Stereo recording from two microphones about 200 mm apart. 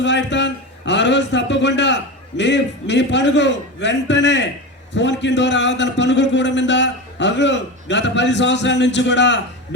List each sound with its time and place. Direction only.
0.0 s a man's voice: 60° left (ahead or behind)